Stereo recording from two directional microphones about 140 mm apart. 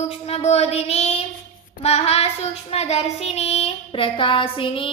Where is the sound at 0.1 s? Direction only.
45° left (ahead or behind).